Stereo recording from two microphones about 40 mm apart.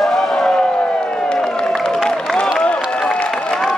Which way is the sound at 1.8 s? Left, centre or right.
Centre.